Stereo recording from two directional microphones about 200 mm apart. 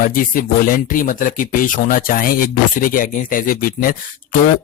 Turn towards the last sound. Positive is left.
turn(degrees=45)  # may be behind; listen again after turning